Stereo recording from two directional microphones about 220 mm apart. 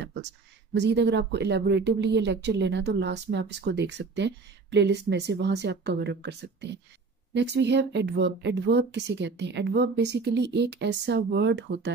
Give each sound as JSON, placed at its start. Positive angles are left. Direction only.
{"t": 0.7, "sound": "speech", "side_deg": -50}